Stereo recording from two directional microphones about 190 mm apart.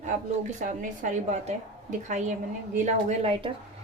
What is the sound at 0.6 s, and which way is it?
A woman's voice, 45° right (ahead or behind).